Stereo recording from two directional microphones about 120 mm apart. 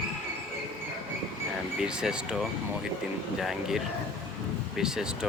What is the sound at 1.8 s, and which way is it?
Speech, 5° right (ahead or behind).